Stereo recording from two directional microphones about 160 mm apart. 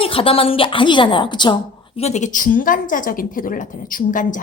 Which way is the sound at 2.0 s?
45° left (ahead or behind).